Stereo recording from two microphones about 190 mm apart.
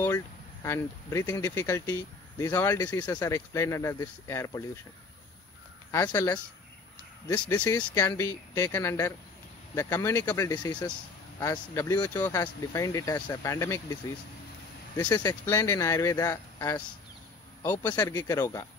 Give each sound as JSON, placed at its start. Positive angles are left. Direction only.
{"t": 0.7, "sound": "speech", "side_deg": 15}
{"t": 5.9, "sound": "speech", "side_deg": 15}
{"t": 7.7, "sound": "speech", "side_deg": 20}
{"t": 15.0, "sound": "speech", "side_deg": 20}